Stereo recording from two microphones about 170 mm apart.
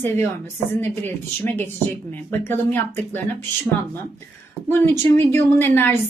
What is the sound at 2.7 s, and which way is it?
Speech, 10° left (ahead or behind).